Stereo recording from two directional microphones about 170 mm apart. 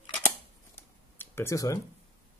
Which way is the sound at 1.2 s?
15° left (ahead or behind).